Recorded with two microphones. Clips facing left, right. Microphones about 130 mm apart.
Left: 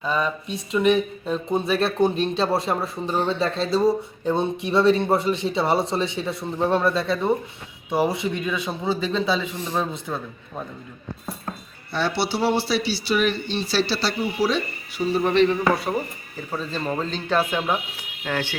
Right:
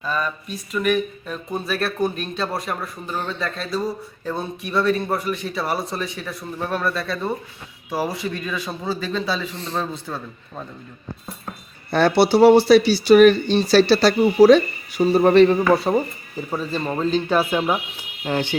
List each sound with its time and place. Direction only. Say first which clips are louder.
0.0 s speech: left 1 dB; 20° left (ahead or behind)
11.9 s speech: right 8 dB; 50° right (ahead or behind)
15.7 s speech: right 6 dB; 25° right (ahead or behind)
16.5 s speech: right 2 dB; 5° right (ahead or behind)